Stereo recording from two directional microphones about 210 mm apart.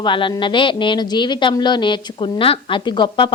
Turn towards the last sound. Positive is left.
turn(degrees=20)  # may be behind; listen again after turning